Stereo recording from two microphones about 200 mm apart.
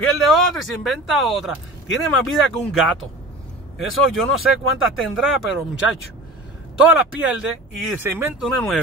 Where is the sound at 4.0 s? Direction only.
Centre (ahead or behind).